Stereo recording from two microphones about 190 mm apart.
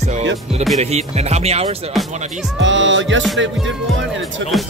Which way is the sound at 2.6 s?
75° right (ahead or behind).